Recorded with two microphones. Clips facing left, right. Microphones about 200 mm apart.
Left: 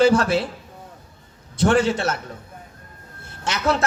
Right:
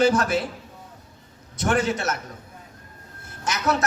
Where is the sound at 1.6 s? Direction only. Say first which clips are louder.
Left 5 dB; 30° left (ahead or behind).